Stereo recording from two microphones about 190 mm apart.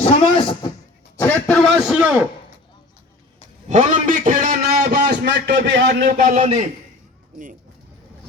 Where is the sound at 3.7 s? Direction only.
40° right (ahead or behind); by 6.1 s 60° right (ahead or behind).